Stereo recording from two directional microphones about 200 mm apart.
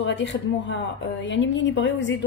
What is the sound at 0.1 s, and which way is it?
Speech, 65° left (ahead or behind).